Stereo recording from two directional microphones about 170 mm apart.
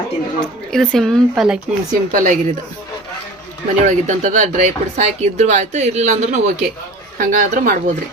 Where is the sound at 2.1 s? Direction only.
50° right (ahead or behind).